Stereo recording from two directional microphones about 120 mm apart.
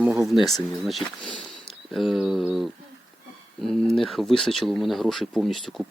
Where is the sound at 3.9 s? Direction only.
Centre (ahead or behind).